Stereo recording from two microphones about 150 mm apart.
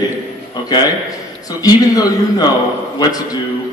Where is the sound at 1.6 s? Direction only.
25° left (ahead or behind).